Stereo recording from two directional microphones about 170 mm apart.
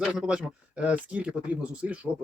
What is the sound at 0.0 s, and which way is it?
Speech, 5° right (ahead or behind).